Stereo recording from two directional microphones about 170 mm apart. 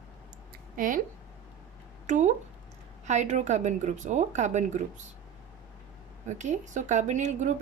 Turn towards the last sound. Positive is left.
turn(degrees=-45)  # may be behind; listen again after turning